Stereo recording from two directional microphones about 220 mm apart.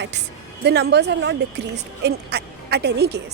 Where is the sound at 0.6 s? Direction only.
50° right (ahead or behind).